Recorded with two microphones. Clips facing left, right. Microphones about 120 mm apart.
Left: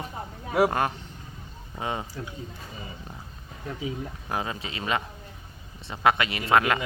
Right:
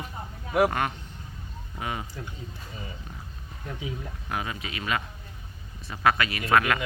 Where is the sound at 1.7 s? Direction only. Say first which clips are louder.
Left 2 dB; 30° left (ahead or behind).